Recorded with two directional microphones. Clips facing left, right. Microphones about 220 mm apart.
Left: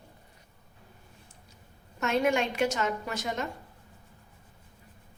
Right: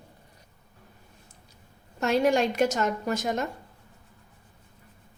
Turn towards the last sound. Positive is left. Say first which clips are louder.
# right 5 dB
turn(degrees=-45)  # may be behind; listen again after turning